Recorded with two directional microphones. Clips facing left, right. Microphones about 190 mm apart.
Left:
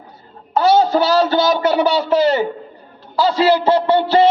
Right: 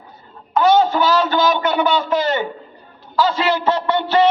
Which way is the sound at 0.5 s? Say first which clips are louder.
Left 1 dB; 40° left (ahead or behind).